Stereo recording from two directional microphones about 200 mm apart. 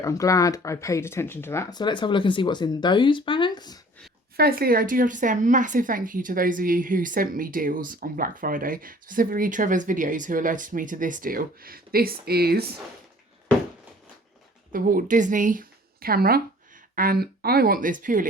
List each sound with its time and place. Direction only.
0.0 s speech: 15° left (ahead or behind)
4.4 s a woman's voice: 50° right (ahead or behind)
14.7 s a woman's voice: 45° right (ahead or behind)